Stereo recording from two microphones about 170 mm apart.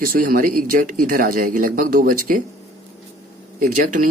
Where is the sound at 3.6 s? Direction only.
50° right (ahead or behind).